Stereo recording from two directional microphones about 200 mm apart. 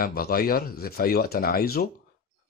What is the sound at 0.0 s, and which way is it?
Speech, 50° left (ahead or behind).